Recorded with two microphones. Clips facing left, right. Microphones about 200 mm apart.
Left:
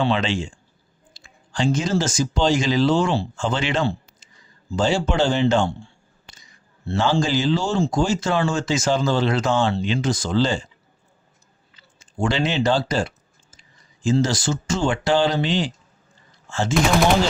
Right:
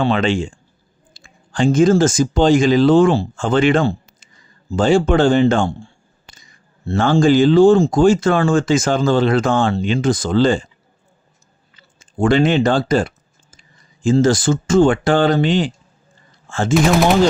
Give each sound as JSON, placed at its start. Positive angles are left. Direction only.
{"t": 0.0, "sound": "speech", "side_deg": -50}
{"t": 11.9, "sound": "speech", "side_deg": -55}